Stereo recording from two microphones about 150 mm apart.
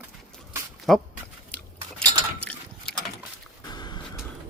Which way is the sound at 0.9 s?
Centre (ahead or behind).